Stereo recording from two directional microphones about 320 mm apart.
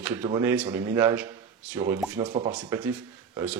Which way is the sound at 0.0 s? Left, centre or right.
Centre.